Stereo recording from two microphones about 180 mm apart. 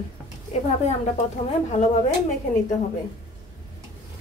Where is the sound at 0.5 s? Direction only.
40° left (ahead or behind).